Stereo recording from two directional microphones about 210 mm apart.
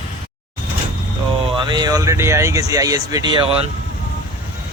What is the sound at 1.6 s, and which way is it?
Speech, 20° right (ahead or behind).